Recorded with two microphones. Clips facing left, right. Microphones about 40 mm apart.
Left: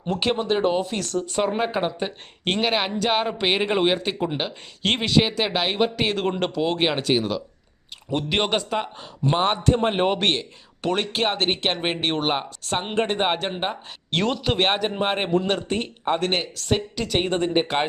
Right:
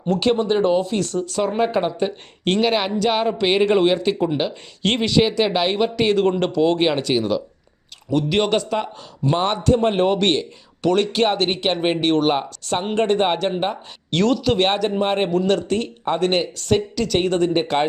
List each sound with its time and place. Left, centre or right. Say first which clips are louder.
0.4 s speech: right 4 dB; centre
0.9 s speech: right 4 dB; centre
1.5 s a man's voice: right 4 dB; centre
15.3 s a man's voice: right 3 dB; left
16.1 s speech: right 6 dB; centre